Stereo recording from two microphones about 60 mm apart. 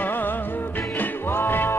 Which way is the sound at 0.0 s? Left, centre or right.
Left.